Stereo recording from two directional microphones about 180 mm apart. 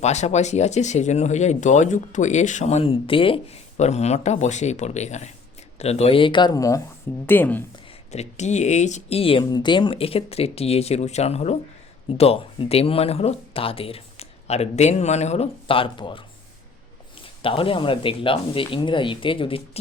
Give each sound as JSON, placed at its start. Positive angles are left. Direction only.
{"t": 0.0, "sound": "speech", "side_deg": 40}
{"t": 8.1, "sound": "speech", "side_deg": 40}
{"t": 17.4, "sound": "speech", "side_deg": 30}